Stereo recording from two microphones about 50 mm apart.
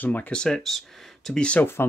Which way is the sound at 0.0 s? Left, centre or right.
Left.